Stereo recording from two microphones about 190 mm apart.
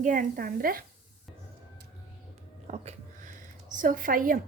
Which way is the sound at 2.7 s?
35° right (ahead or behind).